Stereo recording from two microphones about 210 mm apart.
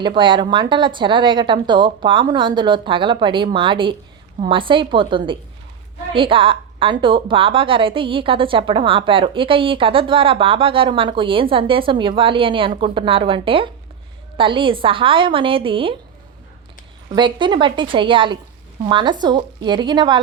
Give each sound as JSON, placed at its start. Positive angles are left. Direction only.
{"t": 0.0, "sound": "a woman's voice", "side_deg": -20}
{"t": 17.2, "sound": "a woman's voice", "side_deg": -20}